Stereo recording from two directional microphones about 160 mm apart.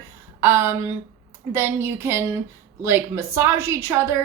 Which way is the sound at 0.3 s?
15° right (ahead or behind).